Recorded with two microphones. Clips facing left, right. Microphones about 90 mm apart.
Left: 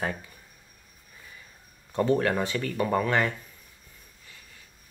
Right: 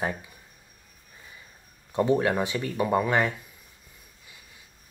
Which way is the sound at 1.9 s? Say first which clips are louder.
Right 1 dB; 15° right (ahead or behind).